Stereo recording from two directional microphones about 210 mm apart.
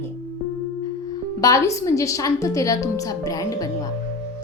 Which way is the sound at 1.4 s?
15° left (ahead or behind).